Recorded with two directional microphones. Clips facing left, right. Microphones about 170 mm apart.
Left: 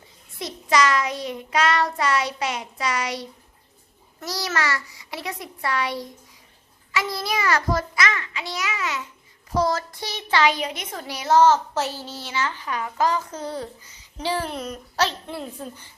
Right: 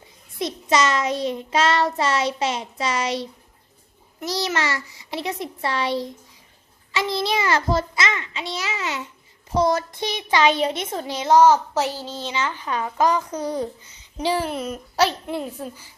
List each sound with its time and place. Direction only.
0.3 s child singing: 20° right (ahead or behind)
11.3 s a child's voice: 10° right (ahead or behind)